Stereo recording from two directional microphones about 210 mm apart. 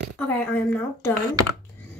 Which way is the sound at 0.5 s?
5° left (ahead or behind).